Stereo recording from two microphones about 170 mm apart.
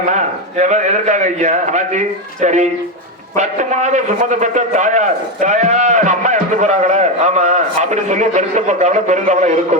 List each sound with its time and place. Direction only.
0.6 s a man's voice: 45° right (ahead or behind)